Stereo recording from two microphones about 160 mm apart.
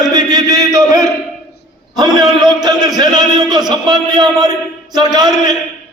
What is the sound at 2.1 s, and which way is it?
A man's voice, 25° right (ahead or behind).